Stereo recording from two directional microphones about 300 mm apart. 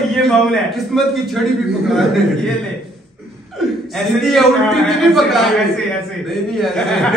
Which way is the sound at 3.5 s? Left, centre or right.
Centre.